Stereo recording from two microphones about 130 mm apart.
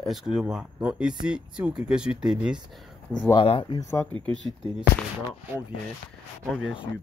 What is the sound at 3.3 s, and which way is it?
Speech, 45° left (ahead or behind).